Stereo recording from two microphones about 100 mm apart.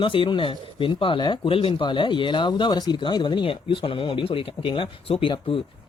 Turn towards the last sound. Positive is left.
turn(degrees=60)  # may be behind; listen again after turning